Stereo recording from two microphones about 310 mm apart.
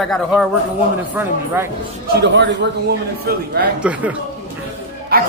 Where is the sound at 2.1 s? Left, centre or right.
Right.